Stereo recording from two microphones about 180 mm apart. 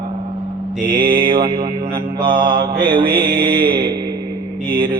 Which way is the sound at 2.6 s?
55° right (ahead or behind).